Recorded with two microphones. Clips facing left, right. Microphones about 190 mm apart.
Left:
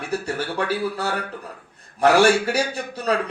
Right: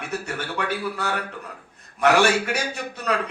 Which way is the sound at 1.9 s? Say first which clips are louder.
Left 3 dB; 30° left (ahead or behind).